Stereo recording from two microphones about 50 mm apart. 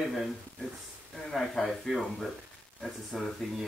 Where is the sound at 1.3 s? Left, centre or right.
Centre.